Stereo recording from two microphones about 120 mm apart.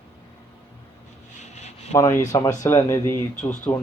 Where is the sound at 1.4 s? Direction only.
75° left (ahead or behind).